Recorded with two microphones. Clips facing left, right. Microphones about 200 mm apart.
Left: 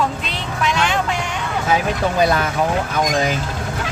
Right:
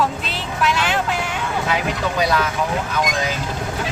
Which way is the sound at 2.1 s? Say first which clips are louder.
Left 3 dB; 50° left (ahead or behind).